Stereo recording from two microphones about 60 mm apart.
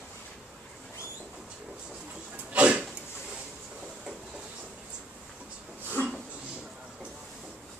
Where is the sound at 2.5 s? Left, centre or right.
Right.